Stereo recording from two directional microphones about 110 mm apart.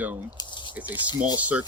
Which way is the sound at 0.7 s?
15° right (ahead or behind).